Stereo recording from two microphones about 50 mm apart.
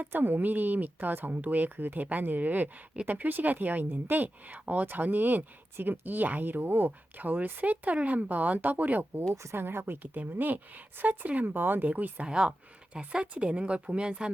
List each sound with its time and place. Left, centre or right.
0.0 s speech: right
9.3 s speech: right
9.6 s speech: right
10.2 s speech: right
12.2 s speech: centre